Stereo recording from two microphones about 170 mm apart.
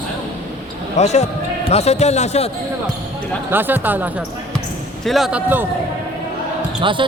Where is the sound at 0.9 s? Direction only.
40° left (ahead or behind).